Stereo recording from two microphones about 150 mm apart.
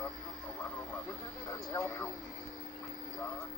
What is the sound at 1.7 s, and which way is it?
Vehicle, 20° left (ahead or behind).